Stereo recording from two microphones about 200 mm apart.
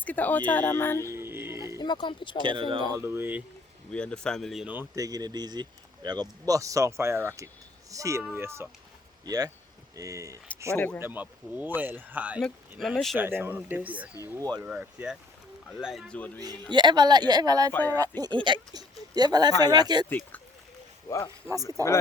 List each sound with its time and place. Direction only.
0.0 s speech: 10° left (ahead or behind)
1.1 s music: 10° right (ahead or behind)
1.8 s speech: 20° left (ahead or behind)
2.4 s speech: 25° right (ahead or behind)
3.0 s speech: 10° right (ahead or behind)
3.9 s speech: 5° left (ahead or behind); by 10.4 s 15° right (ahead or behind)
10.8 s speech: 10° left (ahead or behind)
11.0 s speech: 10° right (ahead or behind)
13.1 s speech: 10° right (ahead or behind); by 16.4 s 5° left (ahead or behind)
16.7 s speech: 20° right (ahead or behind)
17.7 s speech: 10° left (ahead or behind)
18.2 s speech: 25° right (ahead or behind)
20.1 s speech: 10° left (ahead or behind)
21.4 s speech: 15° right (ahead or behind)